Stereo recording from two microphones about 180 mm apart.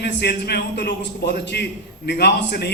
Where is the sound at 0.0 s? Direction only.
65° left (ahead or behind).